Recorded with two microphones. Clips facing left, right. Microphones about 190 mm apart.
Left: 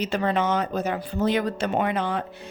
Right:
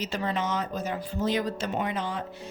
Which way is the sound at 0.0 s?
60° left (ahead or behind).